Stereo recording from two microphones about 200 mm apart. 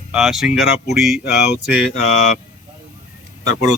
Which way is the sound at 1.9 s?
90° left.